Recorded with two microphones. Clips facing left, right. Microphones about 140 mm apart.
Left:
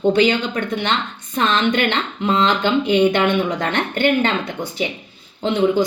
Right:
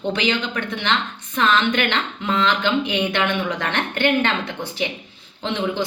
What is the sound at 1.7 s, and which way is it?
A woman's voice, 30° left (ahead or behind).